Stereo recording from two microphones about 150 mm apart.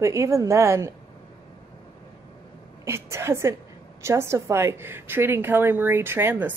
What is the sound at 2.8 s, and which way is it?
Speech, 20° right (ahead or behind).